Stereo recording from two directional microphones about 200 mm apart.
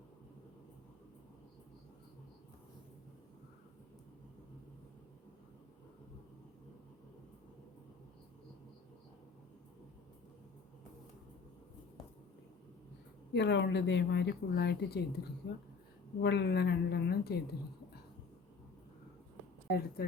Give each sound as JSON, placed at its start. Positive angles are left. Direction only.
{"t": 13.3, "sound": "speech", "side_deg": 60}
{"t": 19.6, "sound": "speech", "side_deg": 50}